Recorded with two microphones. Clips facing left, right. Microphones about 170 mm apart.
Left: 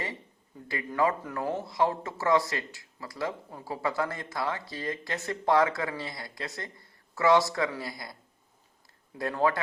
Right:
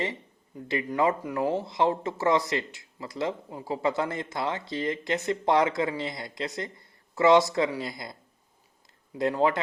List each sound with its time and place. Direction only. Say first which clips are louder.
0.7 s speech: right 2 dB; 20° right (ahead or behind)
9.1 s speech: right 3 dB; 20° right (ahead or behind)